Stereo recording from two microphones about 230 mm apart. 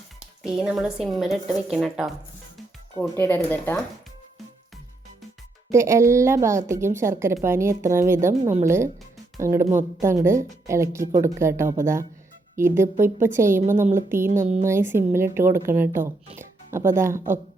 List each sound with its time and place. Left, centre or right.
0.4 s a woman's voice: centre
5.7 s speech: centre
14.3 s a woman's voice: right
14.6 s speech: centre